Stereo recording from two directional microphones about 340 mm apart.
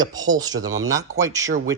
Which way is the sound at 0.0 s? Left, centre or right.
Centre.